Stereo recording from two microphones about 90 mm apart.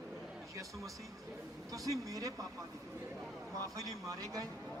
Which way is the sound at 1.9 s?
40° right (ahead or behind).